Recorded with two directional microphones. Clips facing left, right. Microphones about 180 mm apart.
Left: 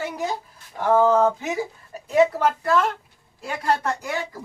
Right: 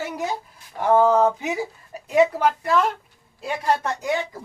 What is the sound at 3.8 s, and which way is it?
Speech, 20° right (ahead or behind).